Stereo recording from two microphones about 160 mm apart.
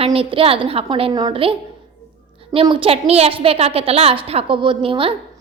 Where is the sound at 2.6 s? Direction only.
30° right (ahead or behind).